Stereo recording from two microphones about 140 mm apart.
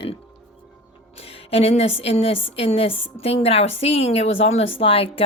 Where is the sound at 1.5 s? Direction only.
45° left (ahead or behind).